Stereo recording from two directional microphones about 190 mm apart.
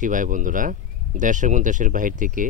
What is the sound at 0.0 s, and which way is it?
Speech, 45° right (ahead or behind).